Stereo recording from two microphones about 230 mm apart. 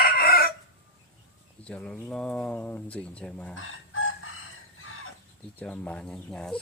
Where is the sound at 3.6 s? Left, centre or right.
Left.